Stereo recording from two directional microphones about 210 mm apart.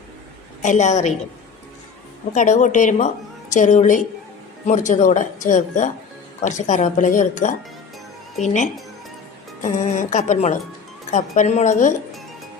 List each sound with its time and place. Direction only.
0.6 s speech: 35° left (ahead or behind)
2.3 s speech: 35° left (ahead or behind)